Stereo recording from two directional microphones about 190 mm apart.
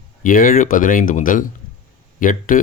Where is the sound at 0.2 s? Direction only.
45° left (ahead or behind).